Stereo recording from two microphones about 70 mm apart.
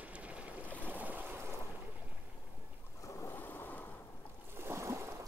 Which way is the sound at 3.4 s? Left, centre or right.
Left.